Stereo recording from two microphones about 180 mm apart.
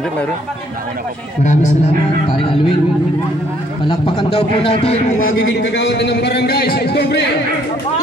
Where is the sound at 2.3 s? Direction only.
30° left (ahead or behind).